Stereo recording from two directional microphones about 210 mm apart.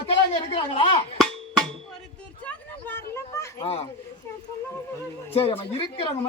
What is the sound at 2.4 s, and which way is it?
Speech, 10° left (ahead or behind).